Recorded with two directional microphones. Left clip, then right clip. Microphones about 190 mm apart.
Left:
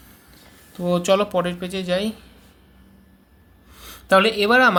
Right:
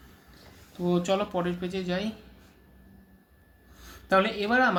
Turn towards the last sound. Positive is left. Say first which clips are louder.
# left 9 dB
turn(degrees=50)  # may be behind; listen again after turning